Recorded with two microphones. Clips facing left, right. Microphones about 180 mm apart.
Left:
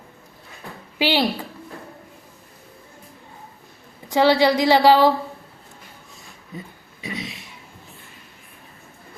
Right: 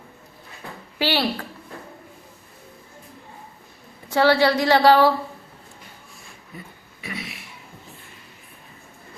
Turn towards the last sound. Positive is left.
turn(degrees=20)  # may be behind; listen again after turning